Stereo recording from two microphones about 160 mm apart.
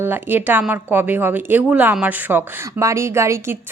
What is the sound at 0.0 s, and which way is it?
Speech, 10° right (ahead or behind).